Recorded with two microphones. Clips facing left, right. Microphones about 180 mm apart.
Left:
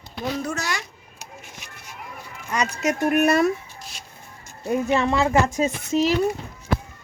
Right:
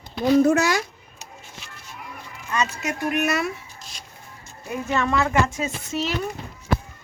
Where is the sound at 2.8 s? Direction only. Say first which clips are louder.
Left 9 dB; 45° left (ahead or behind).